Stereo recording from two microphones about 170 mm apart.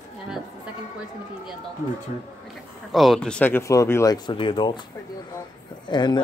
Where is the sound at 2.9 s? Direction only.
Centre (ahead or behind); by 4.8 s 30° left (ahead or behind).